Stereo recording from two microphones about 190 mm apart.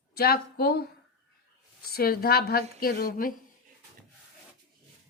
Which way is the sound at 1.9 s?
55° left (ahead or behind).